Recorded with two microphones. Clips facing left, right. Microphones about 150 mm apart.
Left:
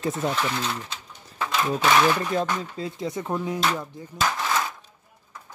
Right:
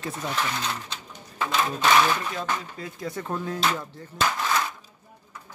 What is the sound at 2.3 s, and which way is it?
Speech, 25° left (ahead or behind).